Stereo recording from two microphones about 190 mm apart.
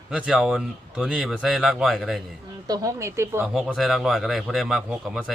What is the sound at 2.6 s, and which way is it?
Speech, 20° right (ahead or behind).